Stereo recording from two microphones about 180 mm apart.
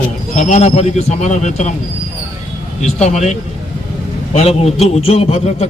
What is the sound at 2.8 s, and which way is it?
A man's voice, 40° left (ahead or behind).